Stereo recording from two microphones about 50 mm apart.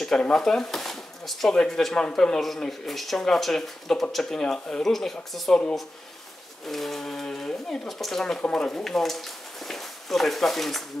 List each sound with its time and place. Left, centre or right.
0.2 s speech: centre
2.0 s speech: centre
6.6 s a sound: centre
8.0 s speech: centre